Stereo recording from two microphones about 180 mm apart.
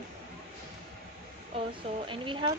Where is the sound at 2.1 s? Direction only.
25° right (ahead or behind).